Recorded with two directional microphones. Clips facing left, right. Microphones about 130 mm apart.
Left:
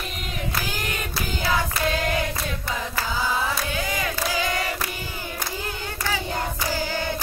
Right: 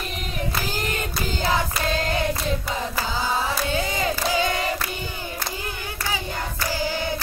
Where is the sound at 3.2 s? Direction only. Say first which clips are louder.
Right 1 dB; 30° right (ahead or behind).